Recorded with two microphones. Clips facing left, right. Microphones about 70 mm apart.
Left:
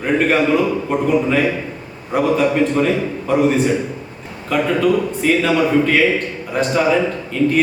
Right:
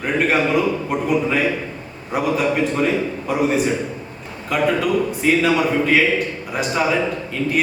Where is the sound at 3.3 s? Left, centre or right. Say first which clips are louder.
Left 5 dB; centre.